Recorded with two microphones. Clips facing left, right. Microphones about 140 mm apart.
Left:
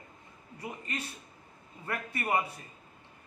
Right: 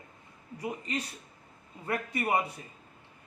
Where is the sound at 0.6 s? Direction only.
10° right (ahead or behind).